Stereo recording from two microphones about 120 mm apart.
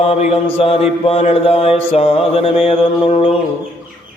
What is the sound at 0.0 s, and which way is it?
Mantra, 55° left (ahead or behind).